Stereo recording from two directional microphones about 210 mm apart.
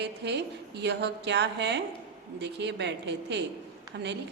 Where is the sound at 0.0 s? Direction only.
55° right (ahead or behind).